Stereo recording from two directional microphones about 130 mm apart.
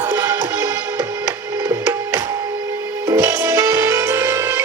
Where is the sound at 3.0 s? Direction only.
20° right (ahead or behind).